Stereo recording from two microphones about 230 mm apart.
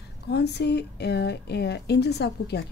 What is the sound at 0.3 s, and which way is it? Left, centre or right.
A woman's voice, left.